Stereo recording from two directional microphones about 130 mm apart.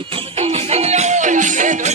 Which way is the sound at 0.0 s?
45° right (ahead or behind).